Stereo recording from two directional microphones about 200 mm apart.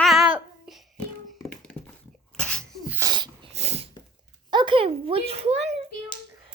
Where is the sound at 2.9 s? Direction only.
20° right (ahead or behind).